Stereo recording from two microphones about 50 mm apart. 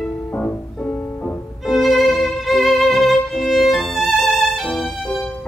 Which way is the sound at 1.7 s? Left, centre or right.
Centre.